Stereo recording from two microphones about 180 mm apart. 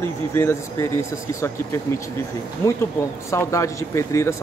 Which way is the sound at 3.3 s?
15° left (ahead or behind).